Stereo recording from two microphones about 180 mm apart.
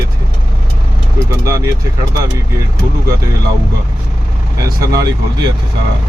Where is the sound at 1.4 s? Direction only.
15° right (ahead or behind).